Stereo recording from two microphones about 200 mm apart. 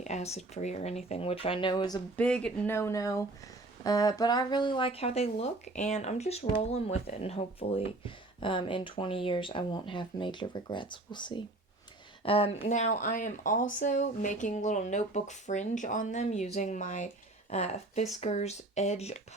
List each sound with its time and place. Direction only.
0.0 s speech: 35° left (ahead or behind)
2.1 s speech: 5° left (ahead or behind); by 19.2 s 35° left (ahead or behind)